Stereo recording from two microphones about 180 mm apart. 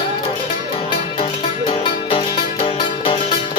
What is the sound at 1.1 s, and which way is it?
Music, 30° left (ahead or behind).